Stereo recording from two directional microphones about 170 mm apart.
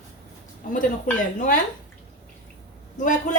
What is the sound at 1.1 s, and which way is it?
Speech, 55° left (ahead or behind).